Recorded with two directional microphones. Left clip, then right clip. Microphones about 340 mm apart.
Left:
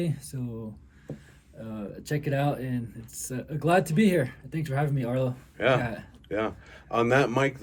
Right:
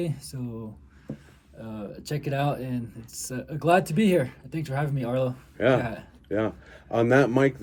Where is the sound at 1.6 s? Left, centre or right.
Centre.